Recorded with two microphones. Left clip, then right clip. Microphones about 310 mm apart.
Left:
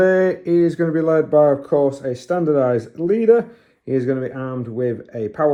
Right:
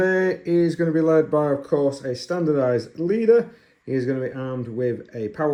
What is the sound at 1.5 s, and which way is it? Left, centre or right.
Speech, left.